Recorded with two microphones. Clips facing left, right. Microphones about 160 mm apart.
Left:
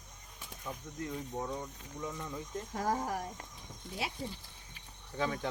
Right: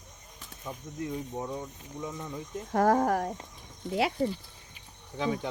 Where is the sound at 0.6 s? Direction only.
20° right (ahead or behind).